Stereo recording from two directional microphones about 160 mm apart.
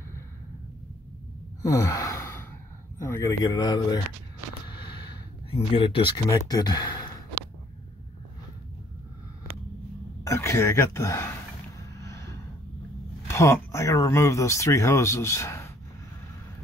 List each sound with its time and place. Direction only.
1.6 s gasp: 20° left (ahead or behind)
3.0 s speech: 20° left (ahead or behind)
4.6 s a sound: 30° left (ahead or behind)
10.2 s speech: 20° left (ahead or behind)
12.0 s a sound: 20° left (ahead or behind)
13.3 s speech: 15° left (ahead or behind)